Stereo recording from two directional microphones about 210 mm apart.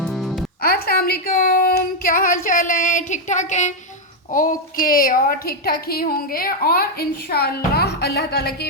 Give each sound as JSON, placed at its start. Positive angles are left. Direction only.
{"t": 0.0, "sound": "music", "side_deg": 0}
{"t": 0.6, "sound": "child singing", "side_deg": 45}
{"t": 4.3, "sound": "a woman's voice", "side_deg": 40}